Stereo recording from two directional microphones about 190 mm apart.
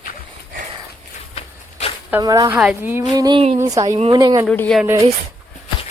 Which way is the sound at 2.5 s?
10° right (ahead or behind).